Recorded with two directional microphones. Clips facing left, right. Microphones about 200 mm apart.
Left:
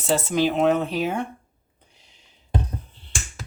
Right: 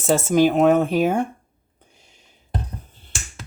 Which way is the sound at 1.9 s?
50° right (ahead or behind).